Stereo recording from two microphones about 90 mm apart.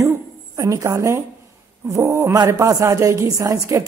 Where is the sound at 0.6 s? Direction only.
35° right (ahead or behind).